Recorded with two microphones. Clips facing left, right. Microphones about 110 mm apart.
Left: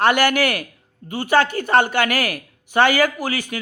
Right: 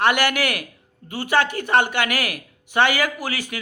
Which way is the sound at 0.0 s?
35° left (ahead or behind).